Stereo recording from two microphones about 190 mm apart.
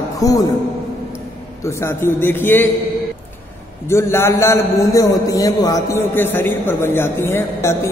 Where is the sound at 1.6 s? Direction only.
15° left (ahead or behind).